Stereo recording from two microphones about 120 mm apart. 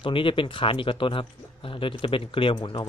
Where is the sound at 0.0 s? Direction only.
45° left (ahead or behind).